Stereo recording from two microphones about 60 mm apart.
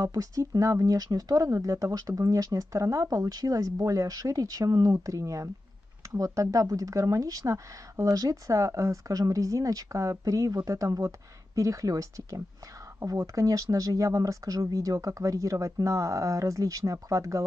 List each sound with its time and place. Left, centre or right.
0.0 s speech: right